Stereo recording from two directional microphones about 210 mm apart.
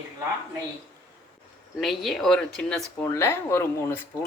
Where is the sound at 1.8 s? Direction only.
Centre (ahead or behind).